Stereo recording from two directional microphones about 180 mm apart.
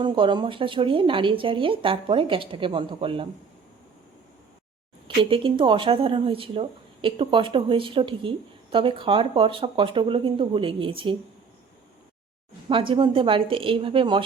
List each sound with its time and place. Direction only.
0.0 s speech: 25° right (ahead or behind)
5.0 s speech: 30° right (ahead or behind)
12.9 s speech: 30° right (ahead or behind)